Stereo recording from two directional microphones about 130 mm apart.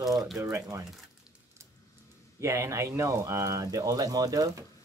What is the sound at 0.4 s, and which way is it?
Speech, 25° right (ahead or behind).